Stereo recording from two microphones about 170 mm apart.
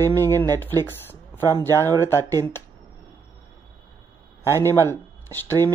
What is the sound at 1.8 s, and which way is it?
Speech, 15° left (ahead or behind).